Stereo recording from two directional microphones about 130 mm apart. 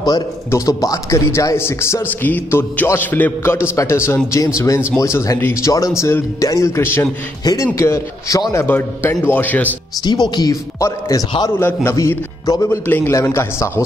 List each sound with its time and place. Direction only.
0.0 s a man's voice: 25° left (ahead or behind)
8.6 s a man's voice: 15° left (ahead or behind)
10.0 s a man's voice: 35° left (ahead or behind)